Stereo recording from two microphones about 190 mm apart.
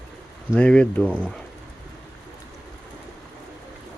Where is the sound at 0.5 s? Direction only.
5° left (ahead or behind).